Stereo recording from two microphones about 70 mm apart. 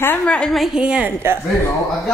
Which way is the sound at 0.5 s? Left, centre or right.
Centre.